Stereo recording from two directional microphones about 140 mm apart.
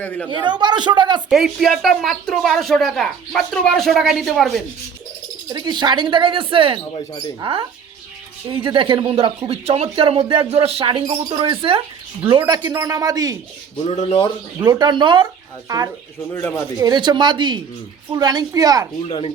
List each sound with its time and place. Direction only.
0.0 s speech: 10° left (ahead or behind)
0.3 s speech: 35° right (ahead or behind)
1.3 s speech: centre (ahead or behind)
5.5 s speech: 30° right (ahead or behind)
6.9 s speech: 35° left (ahead or behind)
7.3 s speech: 35° right (ahead or behind)
12.6 s a woman's voice: 20° right (ahead or behind)
13.8 s speech: 45° left (ahead or behind)
14.6 s speech: 30° right (ahead or behind)
16.3 s speech: 20° left (ahead or behind)
16.7 s a woman's voice: 30° right (ahead or behind)
19.0 s speech: 40° left (ahead or behind)